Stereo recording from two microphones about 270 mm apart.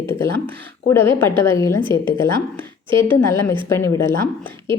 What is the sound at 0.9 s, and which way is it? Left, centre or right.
Speech, centre.